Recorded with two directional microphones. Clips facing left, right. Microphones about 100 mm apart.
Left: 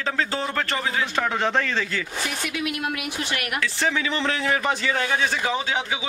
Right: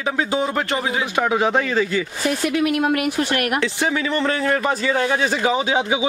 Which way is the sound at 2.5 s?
45° right (ahead or behind).